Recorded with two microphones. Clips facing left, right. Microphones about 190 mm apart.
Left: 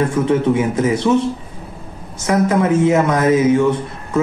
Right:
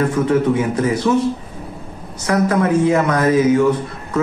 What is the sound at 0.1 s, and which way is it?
Speech, 25° left (ahead or behind).